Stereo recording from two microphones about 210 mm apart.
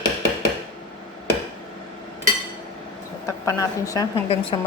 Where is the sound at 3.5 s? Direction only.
15° left (ahead or behind).